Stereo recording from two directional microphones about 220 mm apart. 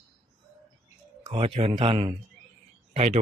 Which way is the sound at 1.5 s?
25° right (ahead or behind).